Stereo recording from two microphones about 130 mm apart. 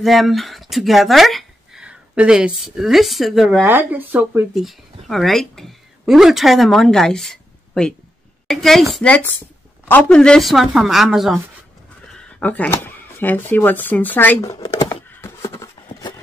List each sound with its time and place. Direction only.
0.0 s speech: centre (ahead or behind)
3.6 s speech: 15° right (ahead or behind)
4.6 s speech: centre (ahead or behind)
12.4 s speech: 10° left (ahead or behind)
15.6 s a sound: 30° left (ahead or behind)